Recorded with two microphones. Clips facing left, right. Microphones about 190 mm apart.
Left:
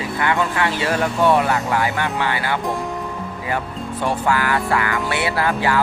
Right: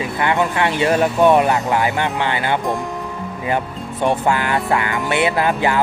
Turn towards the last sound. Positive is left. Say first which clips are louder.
# right 2 dB
turn(degrees=-20)  # may be behind; listen again after turning